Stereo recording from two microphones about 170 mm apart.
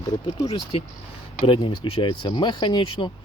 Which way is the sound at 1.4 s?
30° left (ahead or behind).